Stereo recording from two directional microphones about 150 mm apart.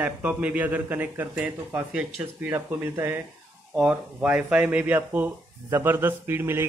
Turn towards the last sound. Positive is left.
turn(degrees=-15)  # may be behind; listen again after turning